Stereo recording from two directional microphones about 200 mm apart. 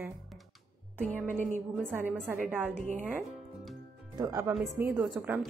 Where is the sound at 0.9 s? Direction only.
10° left (ahead or behind).